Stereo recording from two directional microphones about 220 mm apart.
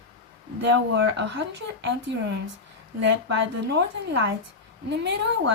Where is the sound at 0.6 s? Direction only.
50° right (ahead or behind).